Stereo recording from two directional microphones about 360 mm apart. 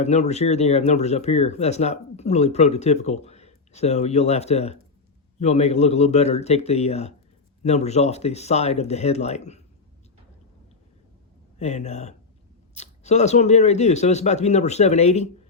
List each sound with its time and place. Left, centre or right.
0.0 s speech: centre
11.6 s speech: centre